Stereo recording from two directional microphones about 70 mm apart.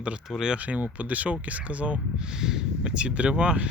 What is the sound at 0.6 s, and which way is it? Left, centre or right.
Speech, right.